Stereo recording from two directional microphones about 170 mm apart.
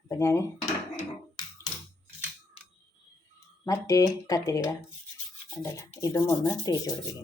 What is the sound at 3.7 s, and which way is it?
Speech, 20° left (ahead or behind).